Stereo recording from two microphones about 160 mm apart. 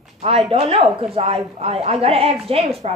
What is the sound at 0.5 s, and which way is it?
A woman's voice, 40° right (ahead or behind).